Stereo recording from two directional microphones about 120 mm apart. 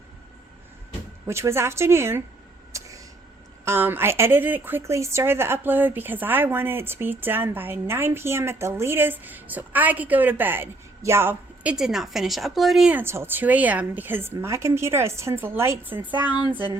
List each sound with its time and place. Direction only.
1.3 s a woman's voice: 20° right (ahead or behind)
2.7 s a sound: 25° right (ahead or behind)
3.6 s a woman's voice: 20° right (ahead or behind); by 12.9 s centre (ahead or behind)
12.9 s a woman's voice: 20° right (ahead or behind)